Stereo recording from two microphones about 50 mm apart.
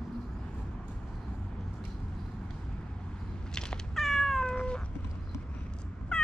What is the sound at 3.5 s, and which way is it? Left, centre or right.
Cat, centre.